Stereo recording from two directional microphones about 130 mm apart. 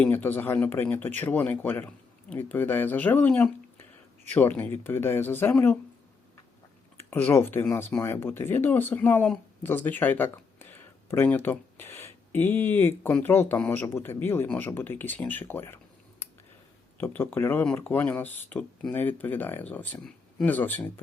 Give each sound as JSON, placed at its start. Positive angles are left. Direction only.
{"t": 0.0, "sound": "speech", "side_deg": 15}
{"t": 6.9, "sound": "speech", "side_deg": 15}
{"t": 17.0, "sound": "speech", "side_deg": 15}